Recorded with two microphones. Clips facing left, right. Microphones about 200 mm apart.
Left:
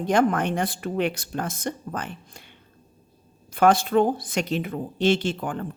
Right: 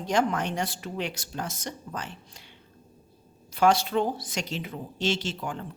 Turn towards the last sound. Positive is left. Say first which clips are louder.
# left 6 dB
turn(degrees=55)  # may be behind; listen again after turning